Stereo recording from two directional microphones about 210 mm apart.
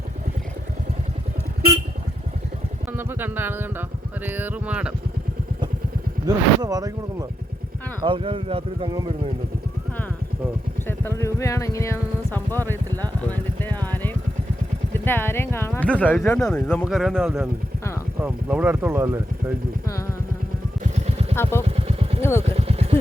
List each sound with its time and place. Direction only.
2.9 s speech: 10° right (ahead or behind)
6.2 s speech: 20° right (ahead or behind)
10.8 s speech: 10° left (ahead or behind)
13.8 s vehicle: 10° left (ahead or behind)
14.9 s speech: 10° left (ahead or behind); by 19.5 s 10° right (ahead or behind)
21.5 s speech: 10° left (ahead or behind)
21.8 s vehicle: 30° right (ahead or behind)
22.2 s speech: 10° left (ahead or behind)
22.5 s vehicle: 30° right (ahead or behind)